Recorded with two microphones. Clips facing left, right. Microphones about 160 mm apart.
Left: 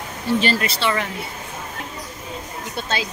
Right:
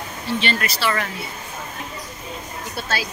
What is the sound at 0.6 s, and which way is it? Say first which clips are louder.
Speech: left 1 dB; 25° left (ahead or behind).